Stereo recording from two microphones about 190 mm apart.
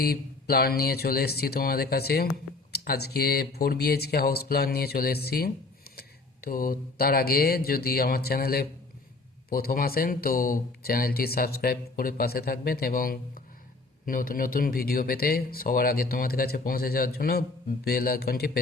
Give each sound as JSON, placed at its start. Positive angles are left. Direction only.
{"t": 0.0, "sound": "speech", "side_deg": 55}